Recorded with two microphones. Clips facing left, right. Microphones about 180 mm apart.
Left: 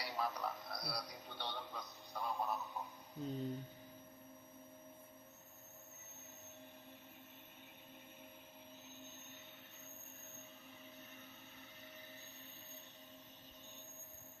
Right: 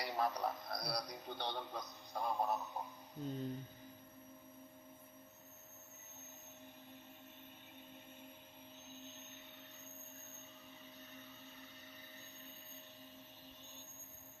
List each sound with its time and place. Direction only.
0.0 s a man's voice: 45° right (ahead or behind)
3.2 s music: centre (ahead or behind)